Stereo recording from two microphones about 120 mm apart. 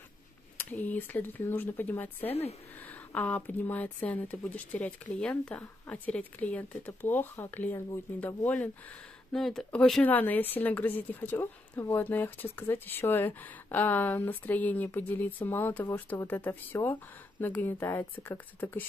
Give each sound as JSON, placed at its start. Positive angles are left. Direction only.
{"t": 0.6, "sound": "speech", "side_deg": 15}
{"t": 9.3, "sound": "speech", "side_deg": 5}